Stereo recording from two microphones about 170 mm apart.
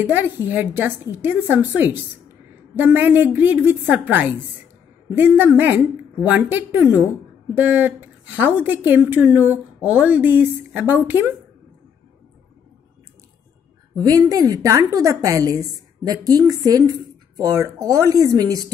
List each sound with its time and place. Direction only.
0.1 s a woman's voice: 10° right (ahead or behind)
13.9 s a woman's voice: 20° right (ahead or behind)